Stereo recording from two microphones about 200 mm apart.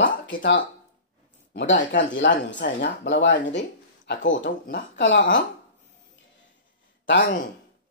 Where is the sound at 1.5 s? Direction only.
65° left (ahead or behind).